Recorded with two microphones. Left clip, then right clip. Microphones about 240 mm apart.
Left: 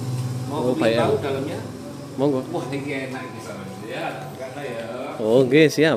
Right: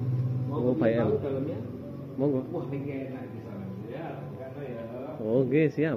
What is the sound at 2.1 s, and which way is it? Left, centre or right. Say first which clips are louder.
Speech: left 7 dB; centre.